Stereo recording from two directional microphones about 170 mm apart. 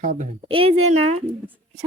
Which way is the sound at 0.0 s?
45° right (ahead or behind).